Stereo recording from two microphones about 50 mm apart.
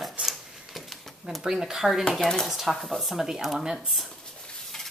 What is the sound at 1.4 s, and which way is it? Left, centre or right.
Speech, centre.